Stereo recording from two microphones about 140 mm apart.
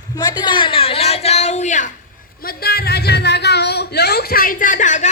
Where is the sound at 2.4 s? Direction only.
90° left.